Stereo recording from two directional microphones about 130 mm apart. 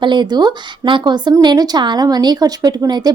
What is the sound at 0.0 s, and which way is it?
Speech, 35° right (ahead or behind).